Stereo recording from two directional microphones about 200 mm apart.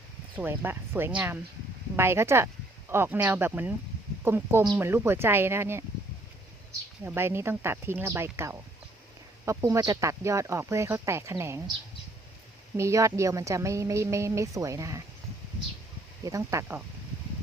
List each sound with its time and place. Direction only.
0.3 s a woman's voice: 10° right (ahead or behind)
7.0 s a woman's voice: 10° right (ahead or behind)
12.7 s a woman's voice: 15° right (ahead or behind)
16.2 s a woman's voice: 15° right (ahead or behind)